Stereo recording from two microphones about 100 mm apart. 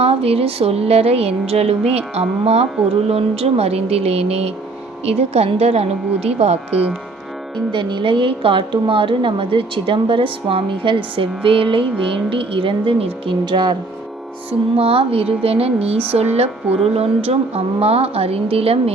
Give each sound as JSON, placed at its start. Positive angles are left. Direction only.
{"t": 0.0, "sound": "speech", "side_deg": -85}
{"t": 7.7, "sound": "a woman's voice", "side_deg": -55}
{"t": 14.8, "sound": "a woman's voice", "side_deg": -70}